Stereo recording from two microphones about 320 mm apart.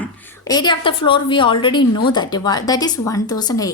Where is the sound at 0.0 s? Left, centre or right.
Centre.